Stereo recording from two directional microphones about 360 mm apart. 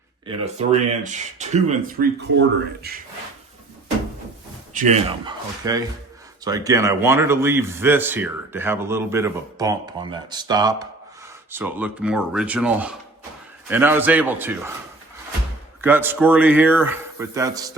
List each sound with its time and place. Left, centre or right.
0.3 s speech: centre
4.7 s a man's voice: centre
15.8 s speech: centre